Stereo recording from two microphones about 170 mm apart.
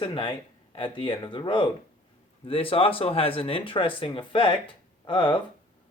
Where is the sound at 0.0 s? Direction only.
30° left (ahead or behind).